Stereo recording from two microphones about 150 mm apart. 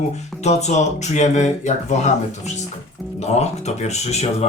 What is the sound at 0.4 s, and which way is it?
Speech, 50° left (ahead or behind).